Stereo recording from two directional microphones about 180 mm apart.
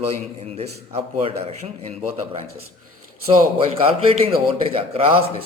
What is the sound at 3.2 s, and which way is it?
Speech, 30° right (ahead or behind).